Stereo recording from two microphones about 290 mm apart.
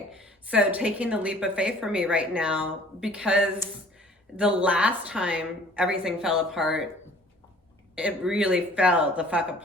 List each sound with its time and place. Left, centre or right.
0.4 s a woman's voice: centre
7.9 s a woman's voice: centre